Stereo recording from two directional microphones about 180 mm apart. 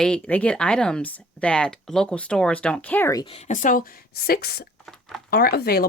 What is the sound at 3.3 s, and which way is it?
Speech, 40° left (ahead or behind).